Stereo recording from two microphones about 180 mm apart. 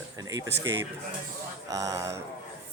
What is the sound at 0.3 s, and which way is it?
Speech, 20° right (ahead or behind).